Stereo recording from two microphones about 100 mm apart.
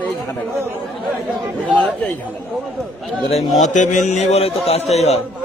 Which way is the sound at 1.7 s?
15° left (ahead or behind).